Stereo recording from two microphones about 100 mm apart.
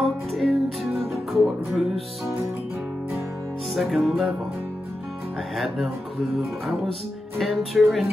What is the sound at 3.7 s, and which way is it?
Speech, centre (ahead or behind).